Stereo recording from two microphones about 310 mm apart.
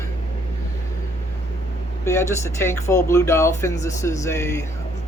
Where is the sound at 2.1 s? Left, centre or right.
Centre.